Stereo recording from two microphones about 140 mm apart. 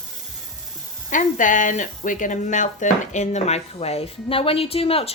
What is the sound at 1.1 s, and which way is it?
Speech, 70° left (ahead or behind).